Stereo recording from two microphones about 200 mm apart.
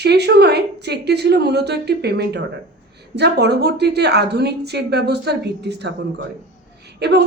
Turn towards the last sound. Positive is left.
turn(degrees=-55)  # may be behind; listen again after turning